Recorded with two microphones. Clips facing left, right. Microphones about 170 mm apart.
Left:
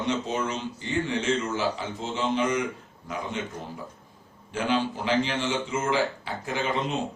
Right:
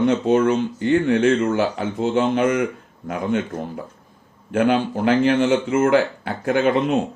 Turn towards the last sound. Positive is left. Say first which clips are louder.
# right 10 dB
turn(degrees=-55)  # may be behind; listen again after turning